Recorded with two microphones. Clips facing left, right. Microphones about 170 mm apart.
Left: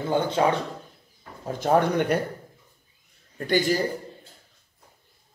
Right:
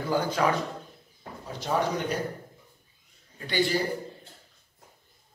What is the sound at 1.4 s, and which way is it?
Speech, 50° left (ahead or behind).